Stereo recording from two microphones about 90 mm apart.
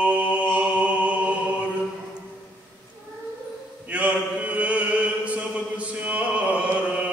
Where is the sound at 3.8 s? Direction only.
15° right (ahead or behind).